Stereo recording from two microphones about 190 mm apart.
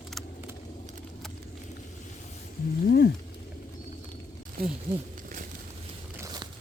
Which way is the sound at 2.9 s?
60° left (ahead or behind).